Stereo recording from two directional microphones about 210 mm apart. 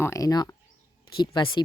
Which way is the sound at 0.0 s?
15° left (ahead or behind).